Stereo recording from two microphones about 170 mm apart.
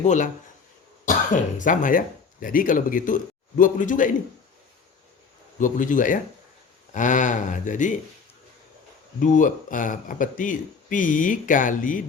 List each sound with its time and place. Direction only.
0.0 s speech: 45° left (ahead or behind)
5.5 s speech: 50° left (ahead or behind)
9.2 s speech: 50° left (ahead or behind)